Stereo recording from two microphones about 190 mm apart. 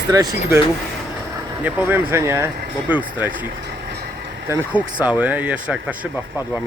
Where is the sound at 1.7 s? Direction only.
10° right (ahead or behind).